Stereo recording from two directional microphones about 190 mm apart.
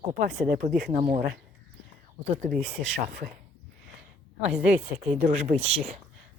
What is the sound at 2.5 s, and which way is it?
Speech, 35° right (ahead or behind).